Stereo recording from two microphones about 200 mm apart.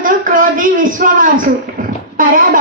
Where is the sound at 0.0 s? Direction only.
45° right (ahead or behind).